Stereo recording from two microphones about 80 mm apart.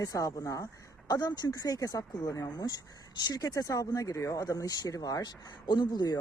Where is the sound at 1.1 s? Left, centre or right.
Left.